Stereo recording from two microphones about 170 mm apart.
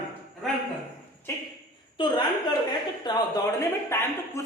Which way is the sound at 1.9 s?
30° left (ahead or behind).